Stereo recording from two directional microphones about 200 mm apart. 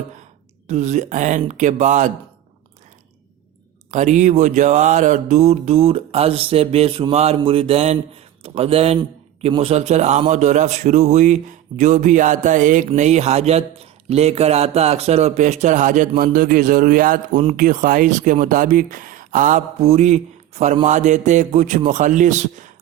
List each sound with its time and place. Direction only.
0.7 s a man's voice: 35° right (ahead or behind)
3.9 s a man's voice: 35° right (ahead or behind)